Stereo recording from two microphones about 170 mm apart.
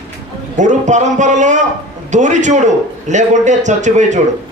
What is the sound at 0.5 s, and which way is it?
A man's voice, 45° right (ahead or behind).